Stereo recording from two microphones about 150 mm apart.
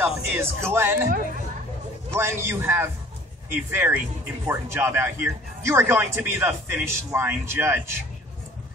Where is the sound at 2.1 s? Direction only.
15° right (ahead or behind).